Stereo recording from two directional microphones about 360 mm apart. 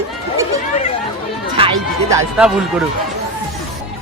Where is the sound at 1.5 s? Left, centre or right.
Centre.